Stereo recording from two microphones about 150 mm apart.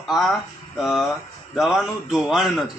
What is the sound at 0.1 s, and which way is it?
Speech, centre (ahead or behind).